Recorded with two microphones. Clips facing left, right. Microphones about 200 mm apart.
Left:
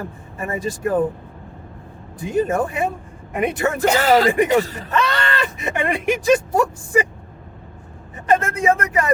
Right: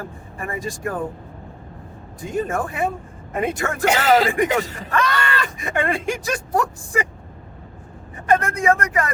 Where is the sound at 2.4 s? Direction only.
25° left (ahead or behind).